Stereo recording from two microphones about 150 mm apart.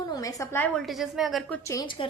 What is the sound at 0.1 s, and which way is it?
Speech, 25° left (ahead or behind).